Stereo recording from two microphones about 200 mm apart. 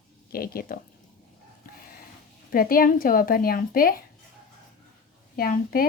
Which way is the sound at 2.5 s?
45° left (ahead or behind).